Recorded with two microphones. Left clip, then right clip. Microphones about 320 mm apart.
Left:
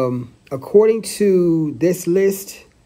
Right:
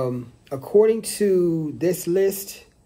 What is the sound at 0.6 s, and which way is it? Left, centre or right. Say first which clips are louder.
Speech: left 4 dB; left.